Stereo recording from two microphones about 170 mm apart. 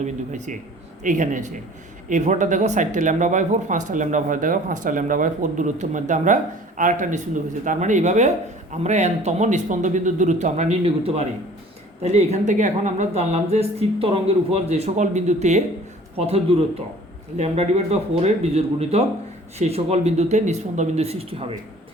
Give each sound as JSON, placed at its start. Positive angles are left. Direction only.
{"t": 0.0, "sound": "a woman's voice", "side_deg": -45}